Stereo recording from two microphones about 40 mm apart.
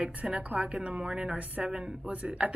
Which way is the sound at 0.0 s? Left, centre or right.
Right.